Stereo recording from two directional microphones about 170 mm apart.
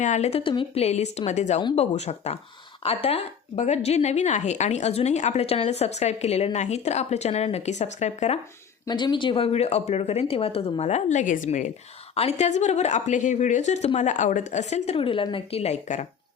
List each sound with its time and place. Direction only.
0.0 s a woman's voice: 40° left (ahead or behind)
8.9 s a woman's voice: 25° left (ahead or behind); by 16.0 s 40° left (ahead or behind)